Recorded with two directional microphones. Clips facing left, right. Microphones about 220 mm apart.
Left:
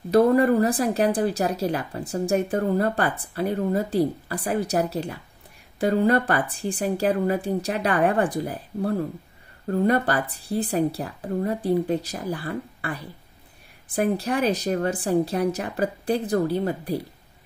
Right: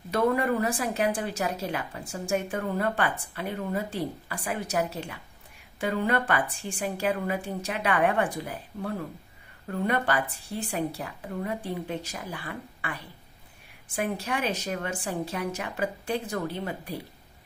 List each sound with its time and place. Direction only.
0.1 s speech: 35° left (ahead or behind)